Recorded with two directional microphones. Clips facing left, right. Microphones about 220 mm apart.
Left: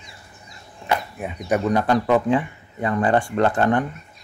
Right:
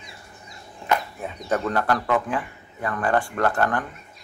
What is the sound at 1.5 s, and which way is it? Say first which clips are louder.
Speech: left 5 dB; 20° left (ahead or behind).